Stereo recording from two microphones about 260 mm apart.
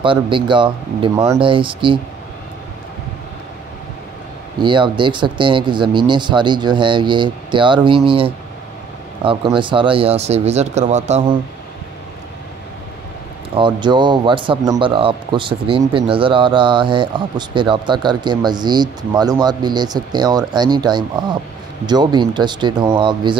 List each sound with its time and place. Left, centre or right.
0.0 s speech: centre
4.6 s speech: centre
13.6 s speech: centre